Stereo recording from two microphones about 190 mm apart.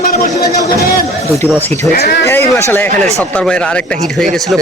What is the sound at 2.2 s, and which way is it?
A man's voice, 15° left (ahead or behind).